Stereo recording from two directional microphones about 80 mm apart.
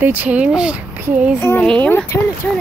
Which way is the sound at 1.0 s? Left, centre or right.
Centre.